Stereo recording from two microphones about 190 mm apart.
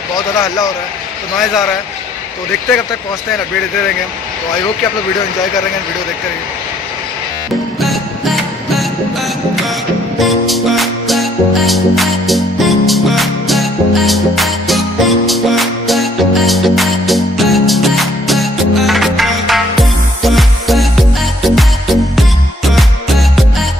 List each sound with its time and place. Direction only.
0.3 s a man's voice: 15° left (ahead or behind)
7.8 s music: centre (ahead or behind)